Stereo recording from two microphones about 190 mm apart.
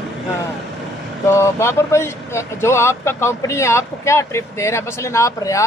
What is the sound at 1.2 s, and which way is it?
Speech, 15° left (ahead or behind).